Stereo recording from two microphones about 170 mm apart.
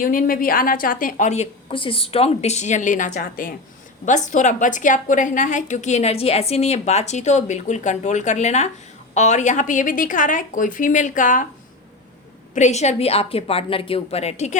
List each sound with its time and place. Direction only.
0.0 s a woman's voice: 55° left (ahead or behind)
12.5 s a woman's voice: 40° left (ahead or behind)